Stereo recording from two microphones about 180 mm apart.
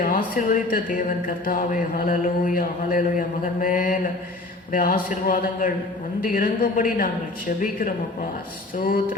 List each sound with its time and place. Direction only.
0.0 s speech: 50° left (ahead or behind)